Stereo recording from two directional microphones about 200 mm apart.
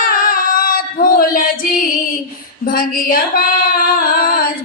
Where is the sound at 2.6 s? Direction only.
45° left (ahead or behind).